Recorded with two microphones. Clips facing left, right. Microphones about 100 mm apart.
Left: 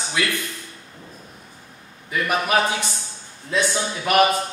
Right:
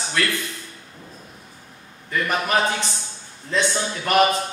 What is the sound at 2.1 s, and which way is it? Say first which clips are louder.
Speech: left 1 dB; 10° left (ahead or behind).